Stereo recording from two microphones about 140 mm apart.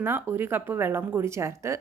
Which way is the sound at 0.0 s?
15° right (ahead or behind).